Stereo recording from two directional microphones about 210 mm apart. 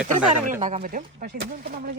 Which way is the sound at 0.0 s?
5° right (ahead or behind).